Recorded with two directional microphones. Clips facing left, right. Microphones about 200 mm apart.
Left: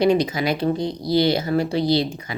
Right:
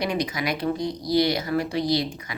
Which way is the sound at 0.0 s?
25° left (ahead or behind).